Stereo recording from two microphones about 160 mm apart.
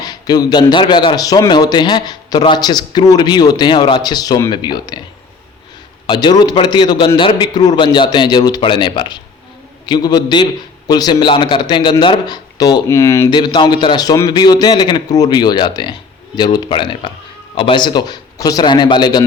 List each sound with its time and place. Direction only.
0.0 s a man's voice: 25° left (ahead or behind)
6.1 s a man's voice: 25° left (ahead or behind)